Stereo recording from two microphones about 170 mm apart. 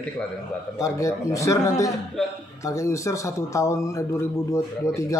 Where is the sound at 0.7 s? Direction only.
20° left (ahead or behind).